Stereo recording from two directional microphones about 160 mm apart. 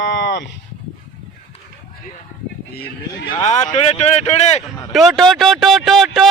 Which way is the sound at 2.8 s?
80° left.